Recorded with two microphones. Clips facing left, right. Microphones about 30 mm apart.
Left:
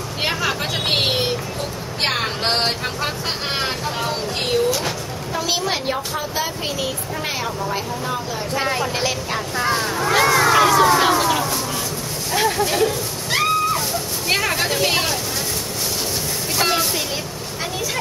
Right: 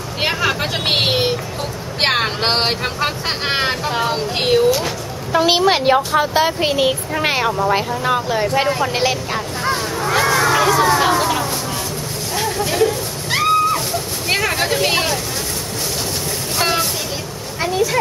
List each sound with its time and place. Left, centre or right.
0.2 s vehicle: centre
2.0 s speech: right
5.3 s a child's voice: right
8.8 s speech: centre
9.3 s a sound: centre
12.3 s vehicle: centre
12.6 s a sound: centre
16.5 s train: centre